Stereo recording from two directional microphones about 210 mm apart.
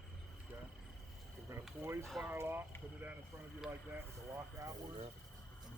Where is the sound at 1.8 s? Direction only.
15° right (ahead or behind).